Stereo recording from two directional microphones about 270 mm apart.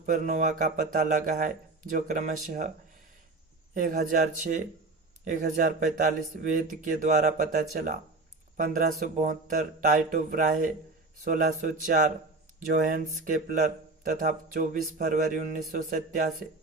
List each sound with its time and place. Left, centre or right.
0.0 s speech: right
3.8 s speech: right